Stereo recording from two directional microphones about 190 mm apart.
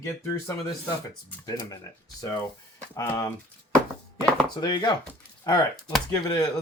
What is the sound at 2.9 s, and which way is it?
Speech, 15° left (ahead or behind).